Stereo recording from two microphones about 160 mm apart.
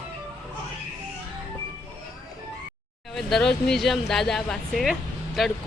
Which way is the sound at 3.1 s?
Centre (ahead or behind).